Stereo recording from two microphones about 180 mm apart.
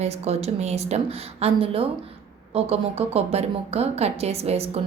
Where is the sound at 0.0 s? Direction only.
35° right (ahead or behind).